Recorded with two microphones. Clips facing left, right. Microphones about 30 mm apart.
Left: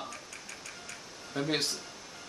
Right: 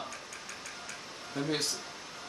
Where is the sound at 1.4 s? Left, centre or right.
Left.